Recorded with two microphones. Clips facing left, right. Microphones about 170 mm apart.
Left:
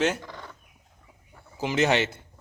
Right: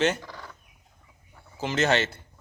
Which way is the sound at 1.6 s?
10° left (ahead or behind).